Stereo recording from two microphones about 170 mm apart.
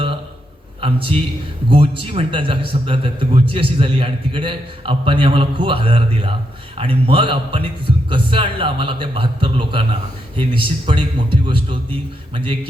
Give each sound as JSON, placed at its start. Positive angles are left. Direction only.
{"t": 0.8, "sound": "a man's voice", "side_deg": -30}